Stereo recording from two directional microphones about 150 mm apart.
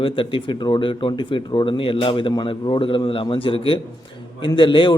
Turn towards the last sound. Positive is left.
turn(degrees=35)  # may be behind; listen again after turning